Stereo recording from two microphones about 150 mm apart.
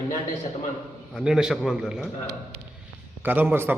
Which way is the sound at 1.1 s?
5° right (ahead or behind).